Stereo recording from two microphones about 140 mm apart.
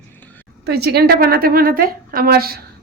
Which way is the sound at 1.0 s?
90° right.